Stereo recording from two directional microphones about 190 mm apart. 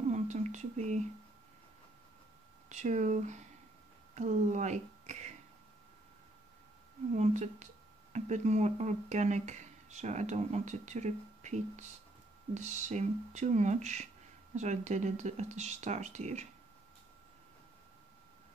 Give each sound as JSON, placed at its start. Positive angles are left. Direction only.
{"t": 0.1, "sound": "a sound", "side_deg": -40}
{"t": 2.7, "sound": "speech", "side_deg": -40}
{"t": 7.2, "sound": "speech", "side_deg": -40}